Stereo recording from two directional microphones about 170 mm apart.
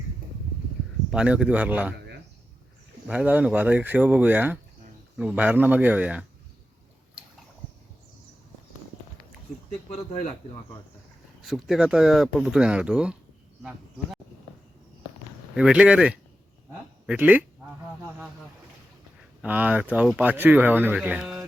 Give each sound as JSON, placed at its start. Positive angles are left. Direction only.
{"t": 1.1, "sound": "speech", "side_deg": -5}
{"t": 3.1, "sound": "speech", "side_deg": -10}
{"t": 9.6, "sound": "speech", "side_deg": 40}
{"t": 11.4, "sound": "speech", "side_deg": 0}
{"t": 15.5, "sound": "speech", "side_deg": -5}
{"t": 19.4, "sound": "speech", "side_deg": -10}